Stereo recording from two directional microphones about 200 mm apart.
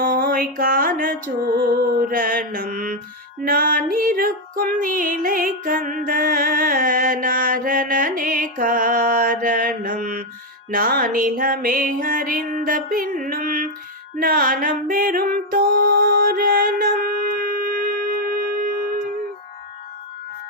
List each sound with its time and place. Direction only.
0.0 s music: 45° right (ahead or behind)
1.6 s mantra: 45° right (ahead or behind)
3.4 s female singing: 45° right (ahead or behind)
10.7 s music: 45° right (ahead or behind)